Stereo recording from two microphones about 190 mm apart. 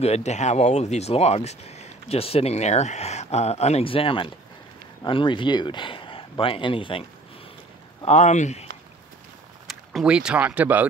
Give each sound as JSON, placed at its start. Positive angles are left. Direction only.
{"t": 0.0, "sound": "speech", "side_deg": 35}
{"t": 9.7, "sound": "speech", "side_deg": -5}